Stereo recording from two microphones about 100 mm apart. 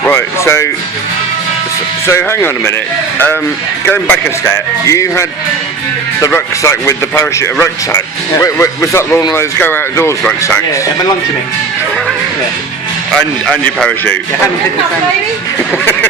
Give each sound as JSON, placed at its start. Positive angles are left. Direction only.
{"t": 0.1, "sound": "speech", "side_deg": 25}
{"t": 2.0, "sound": "speech", "side_deg": 25}
{"t": 3.8, "sound": "speech", "side_deg": 20}
{"t": 4.4, "sound": "speech", "side_deg": 30}
{"t": 6.2, "sound": "speech", "side_deg": 30}
{"t": 13.1, "sound": "speech", "side_deg": 10}